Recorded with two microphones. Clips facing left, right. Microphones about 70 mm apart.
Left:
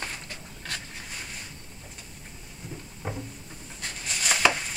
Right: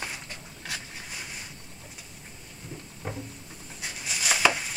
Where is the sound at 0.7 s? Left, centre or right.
Centre.